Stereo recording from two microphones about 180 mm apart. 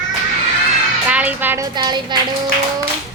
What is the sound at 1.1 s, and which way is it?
A woman's voice, 10° right (ahead or behind).